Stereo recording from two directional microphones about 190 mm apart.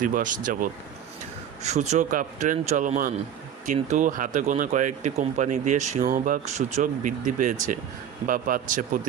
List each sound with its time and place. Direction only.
0.0 s speech: 45° right (ahead or behind)